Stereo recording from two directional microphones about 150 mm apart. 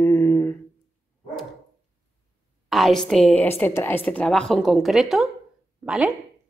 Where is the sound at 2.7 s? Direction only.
Centre (ahead or behind).